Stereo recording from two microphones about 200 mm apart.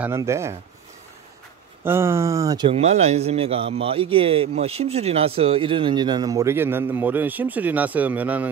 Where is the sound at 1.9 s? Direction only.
10° right (ahead or behind).